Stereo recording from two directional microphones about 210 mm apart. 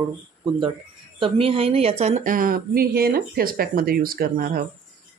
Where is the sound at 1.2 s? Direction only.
25° right (ahead or behind).